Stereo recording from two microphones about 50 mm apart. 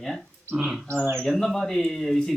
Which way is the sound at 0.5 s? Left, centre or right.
Centre.